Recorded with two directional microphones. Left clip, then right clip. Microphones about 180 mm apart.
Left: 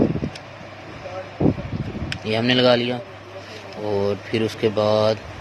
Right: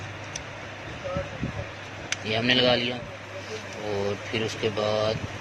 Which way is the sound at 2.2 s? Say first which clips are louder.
Left 4 dB; 40° left (ahead or behind).